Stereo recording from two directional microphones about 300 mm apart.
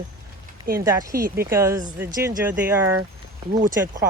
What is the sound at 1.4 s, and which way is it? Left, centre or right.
Speech, centre.